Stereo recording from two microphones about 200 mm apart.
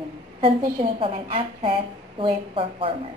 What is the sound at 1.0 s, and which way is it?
Speech, 30° right (ahead or behind).